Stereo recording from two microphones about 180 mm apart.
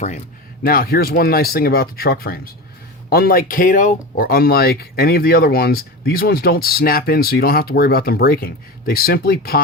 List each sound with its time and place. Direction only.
0.6 s speech: 55° left (ahead or behind)